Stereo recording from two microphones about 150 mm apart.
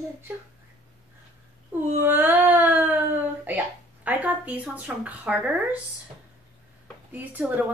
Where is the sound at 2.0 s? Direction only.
15° right (ahead or behind).